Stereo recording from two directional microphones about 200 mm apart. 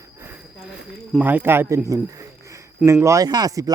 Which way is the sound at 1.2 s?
10° right (ahead or behind).